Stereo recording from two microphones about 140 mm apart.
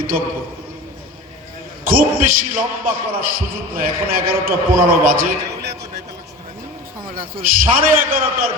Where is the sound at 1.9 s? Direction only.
90° right.